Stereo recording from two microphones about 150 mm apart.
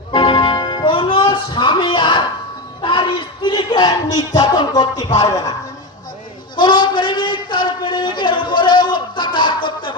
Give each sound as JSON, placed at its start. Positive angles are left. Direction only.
{"t": 0.1, "sound": "music", "side_deg": 35}
{"t": 2.8, "sound": "speech", "side_deg": 30}
{"t": 6.6, "sound": "a sound", "side_deg": 30}